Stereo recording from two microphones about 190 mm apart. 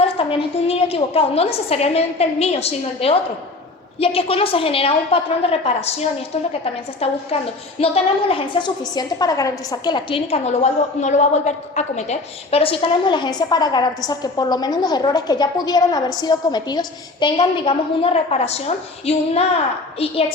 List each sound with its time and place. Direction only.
0.0 s a woman's voice: 30° left (ahead or behind)